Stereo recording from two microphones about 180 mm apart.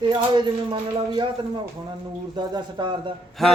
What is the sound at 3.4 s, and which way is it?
Speech, centre (ahead or behind).